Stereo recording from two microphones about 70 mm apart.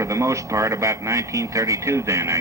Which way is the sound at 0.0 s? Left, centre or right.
Right.